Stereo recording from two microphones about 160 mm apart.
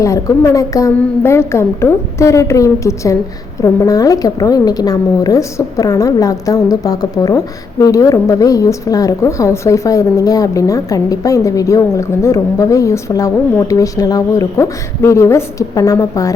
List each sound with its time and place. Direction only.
0.0 s a woman's voice: 20° left (ahead or behind)